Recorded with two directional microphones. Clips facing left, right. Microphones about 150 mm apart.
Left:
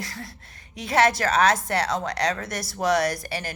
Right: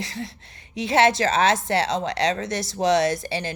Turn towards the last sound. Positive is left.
turn(degrees=-25)  # may be behind; listen again after turning